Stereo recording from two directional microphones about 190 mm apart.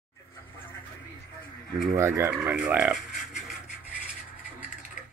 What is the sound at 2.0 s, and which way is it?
Speech, 15° right (ahead or behind).